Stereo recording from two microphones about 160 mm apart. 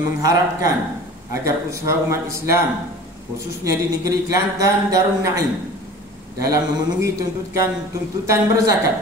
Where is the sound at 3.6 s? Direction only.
20° right (ahead or behind).